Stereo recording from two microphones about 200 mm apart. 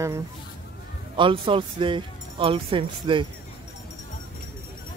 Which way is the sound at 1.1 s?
25° right (ahead or behind).